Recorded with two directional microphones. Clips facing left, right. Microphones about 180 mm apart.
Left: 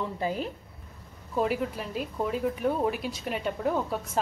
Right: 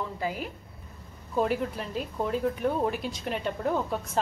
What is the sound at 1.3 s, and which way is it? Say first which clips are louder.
A woman's voice: right 1 dB; centre (ahead or behind).